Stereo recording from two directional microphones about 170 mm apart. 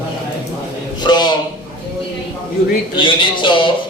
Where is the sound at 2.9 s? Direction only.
30° left (ahead or behind).